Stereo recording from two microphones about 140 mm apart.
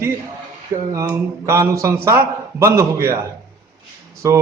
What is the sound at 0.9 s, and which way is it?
A man's voice, 20° right (ahead or behind).